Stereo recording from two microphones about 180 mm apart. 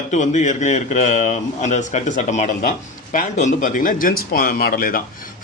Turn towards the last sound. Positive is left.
turn(degrees=55)  # may be behind; listen again after turning